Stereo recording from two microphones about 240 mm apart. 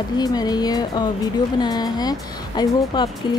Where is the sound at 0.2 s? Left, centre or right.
Centre.